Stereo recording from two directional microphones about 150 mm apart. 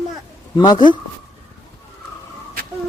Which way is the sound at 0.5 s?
30° left (ahead or behind).